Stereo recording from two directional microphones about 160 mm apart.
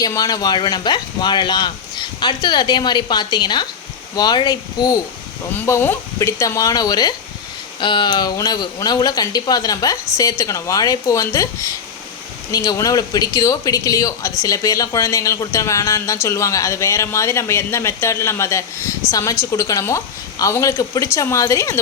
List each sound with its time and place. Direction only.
0.0 s a woman's voice: 25° left (ahead or behind)